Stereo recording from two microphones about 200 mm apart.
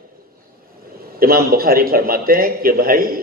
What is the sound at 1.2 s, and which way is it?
A man's voice, 50° right (ahead or behind).